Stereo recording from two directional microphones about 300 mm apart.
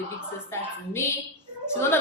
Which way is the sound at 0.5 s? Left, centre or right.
Centre.